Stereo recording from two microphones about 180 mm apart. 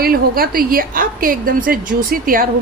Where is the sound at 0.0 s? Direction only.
55° right (ahead or behind).